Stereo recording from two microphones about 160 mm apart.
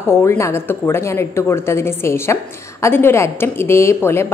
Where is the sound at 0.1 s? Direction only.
15° left (ahead or behind).